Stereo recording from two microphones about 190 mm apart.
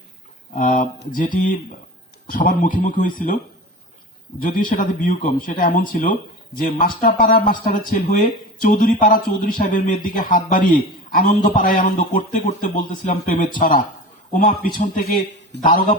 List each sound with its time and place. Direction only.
0.5 s a man's voice: 45° left (ahead or behind)
4.4 s a man's voice: 45° left (ahead or behind)